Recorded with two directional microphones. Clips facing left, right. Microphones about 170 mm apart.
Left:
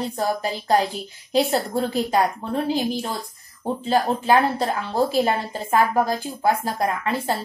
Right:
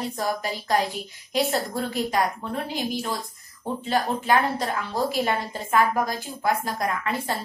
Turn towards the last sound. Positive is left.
turn(degrees=30)  # may be behind; listen again after turning